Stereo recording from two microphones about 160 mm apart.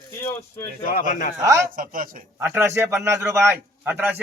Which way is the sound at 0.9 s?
60° left (ahead or behind).